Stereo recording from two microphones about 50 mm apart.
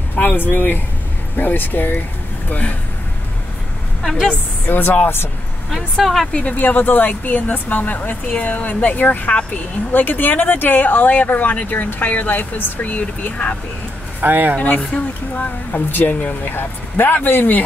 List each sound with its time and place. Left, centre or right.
0.1 s speech: left
4.0 s a woman's voice: centre
4.6 s speech: left
5.7 s speech: centre
6.5 s speech: left
14.2 s speech: right
14.6 s speech: left
15.7 s speech: left
16.1 s speech: left
16.4 s speech: left